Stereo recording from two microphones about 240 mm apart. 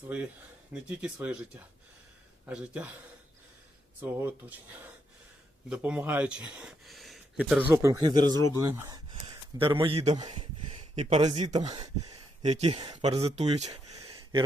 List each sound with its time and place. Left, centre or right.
0.7 s speech: centre
2.5 s speech: centre
4.0 s speech: centre
5.6 s speech: centre
8.6 s a sound: centre
11.1 s speech: right
13.9 s gasp: right